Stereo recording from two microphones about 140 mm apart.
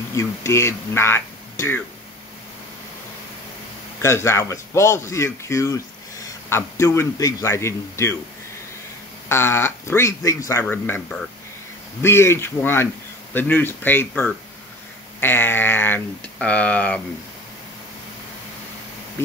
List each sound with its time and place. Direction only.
0.1 s speech: 20° left (ahead or behind)
4.0 s speech: 20° left (ahead or behind)
9.3 s speech: 20° left (ahead or behind)
10.6 s speech: 10° left (ahead or behind)